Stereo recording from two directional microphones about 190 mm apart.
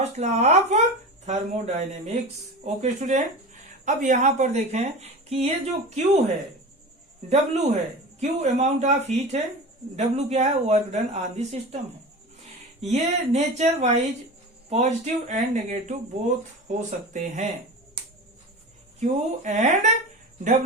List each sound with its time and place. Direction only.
0.0 s speech: 35° right (ahead or behind)
7.3 s speech: 35° right (ahead or behind)
12.8 s speech: 35° right (ahead or behind)
17.1 s speech: 40° right (ahead or behind)
18.9 s speech: 40° right (ahead or behind)